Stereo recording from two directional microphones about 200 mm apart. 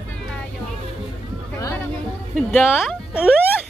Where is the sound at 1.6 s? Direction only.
15° left (ahead or behind).